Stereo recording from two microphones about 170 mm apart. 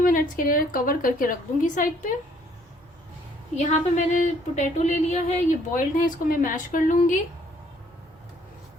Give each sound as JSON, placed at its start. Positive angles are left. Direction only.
{"t": 0.0, "sound": "speech", "side_deg": 55}
{"t": 3.5, "sound": "speech", "side_deg": 45}